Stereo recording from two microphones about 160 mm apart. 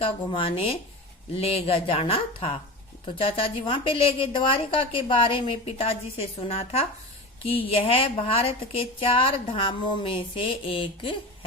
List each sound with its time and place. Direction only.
0.0 s a woman's voice: 35° left (ahead or behind)